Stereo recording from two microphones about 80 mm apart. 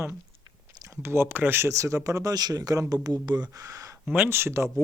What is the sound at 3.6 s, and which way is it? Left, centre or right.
Speech, right.